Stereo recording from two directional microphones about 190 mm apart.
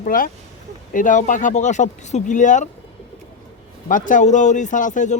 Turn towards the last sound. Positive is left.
turn(degrees=40)  # may be behind; listen again after turning